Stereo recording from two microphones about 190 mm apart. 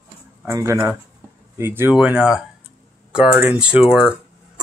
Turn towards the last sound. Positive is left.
turn(degrees=-5)  # may be behind; listen again after turning